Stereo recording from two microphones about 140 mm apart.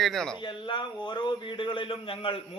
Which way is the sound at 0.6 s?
35° left (ahead or behind).